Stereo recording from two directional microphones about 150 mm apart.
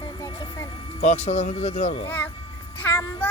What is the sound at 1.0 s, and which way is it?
Speech, 45° left (ahead or behind).